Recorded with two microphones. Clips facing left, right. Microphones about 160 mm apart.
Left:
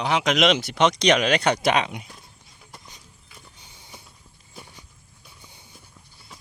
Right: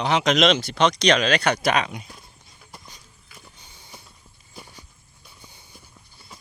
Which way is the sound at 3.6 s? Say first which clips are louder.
Even; 15° left (ahead or behind).